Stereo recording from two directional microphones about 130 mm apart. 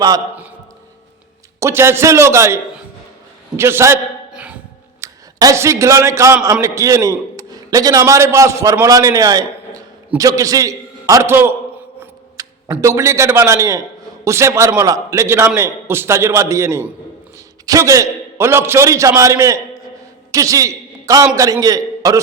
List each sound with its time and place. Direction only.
1.5 s a man's voice: 20° right (ahead or behind)
3.6 s a man's voice: 20° right (ahead or behind)
4.3 s a sound: 10° right (ahead or behind)
4.9 s a man's voice: 25° right (ahead or behind)
12.4 s a sound: 25° right (ahead or behind)
12.8 s a man's voice: 20° right (ahead or behind)